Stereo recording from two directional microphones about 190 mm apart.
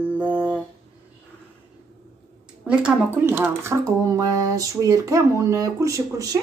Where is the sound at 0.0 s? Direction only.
10° right (ahead or behind).